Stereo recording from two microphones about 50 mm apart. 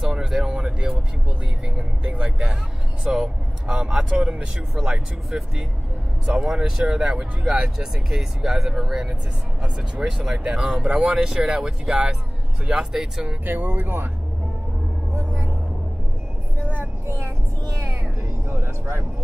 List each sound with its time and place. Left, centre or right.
0.1 s a sound: centre
1.8 s vehicle: centre
3.0 s speech: centre
9.6 s speech: centre
13.5 s speech: right
16.6 s vehicle: right